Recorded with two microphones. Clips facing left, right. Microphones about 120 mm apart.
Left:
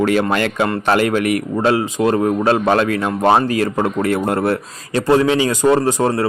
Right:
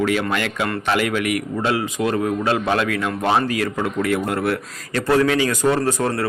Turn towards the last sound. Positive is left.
turn(degrees=25)  # may be behind; listen again after turning